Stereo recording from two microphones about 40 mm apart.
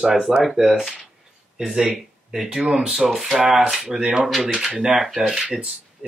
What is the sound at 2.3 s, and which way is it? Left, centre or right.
Speech, centre.